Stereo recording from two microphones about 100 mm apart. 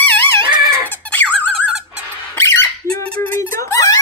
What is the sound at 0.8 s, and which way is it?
Squeak, 20° left (ahead or behind).